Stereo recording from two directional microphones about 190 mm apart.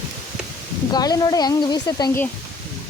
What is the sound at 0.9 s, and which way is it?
Speech, 20° left (ahead or behind).